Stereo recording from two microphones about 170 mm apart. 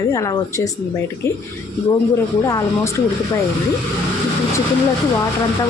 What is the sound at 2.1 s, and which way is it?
Speech, 15° left (ahead or behind).